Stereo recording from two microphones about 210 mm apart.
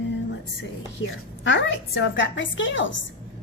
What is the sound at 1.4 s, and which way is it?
A woman's voice, 65° left (ahead or behind).